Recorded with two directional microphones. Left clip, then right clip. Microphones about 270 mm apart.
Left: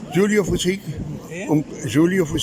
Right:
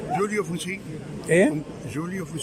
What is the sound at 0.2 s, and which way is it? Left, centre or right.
Speech, left.